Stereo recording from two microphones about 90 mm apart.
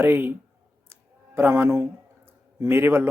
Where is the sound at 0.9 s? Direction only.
25° right (ahead or behind).